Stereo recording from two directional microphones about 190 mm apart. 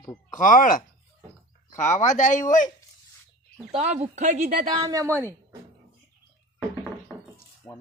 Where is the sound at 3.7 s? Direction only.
35° right (ahead or behind).